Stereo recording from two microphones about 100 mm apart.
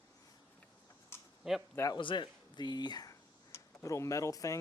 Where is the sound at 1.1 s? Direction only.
25° left (ahead or behind).